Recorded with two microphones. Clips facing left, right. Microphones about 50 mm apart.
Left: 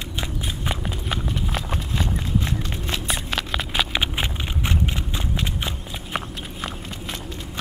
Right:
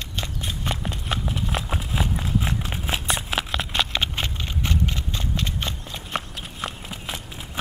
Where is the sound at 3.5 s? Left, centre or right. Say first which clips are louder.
Left 3 dB; centre.